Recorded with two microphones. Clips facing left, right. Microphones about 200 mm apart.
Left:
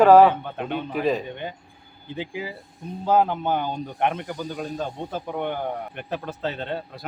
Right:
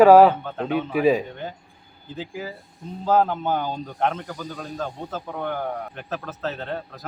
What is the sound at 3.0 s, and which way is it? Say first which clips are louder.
Speech: even; 10° left (ahead or behind).